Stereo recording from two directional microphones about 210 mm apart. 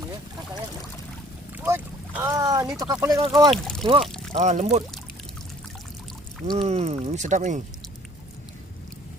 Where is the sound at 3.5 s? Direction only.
Centre (ahead or behind).